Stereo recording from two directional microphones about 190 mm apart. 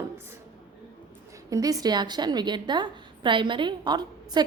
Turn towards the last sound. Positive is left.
turn(degrees=-20)  # may be behind; listen again after turning